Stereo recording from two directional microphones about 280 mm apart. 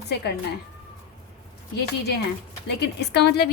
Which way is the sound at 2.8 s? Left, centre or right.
Left.